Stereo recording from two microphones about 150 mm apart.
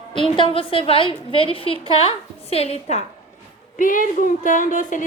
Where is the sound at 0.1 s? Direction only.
35° left (ahead or behind).